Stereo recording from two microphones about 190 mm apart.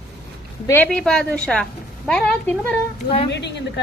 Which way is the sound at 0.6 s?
10° left (ahead or behind).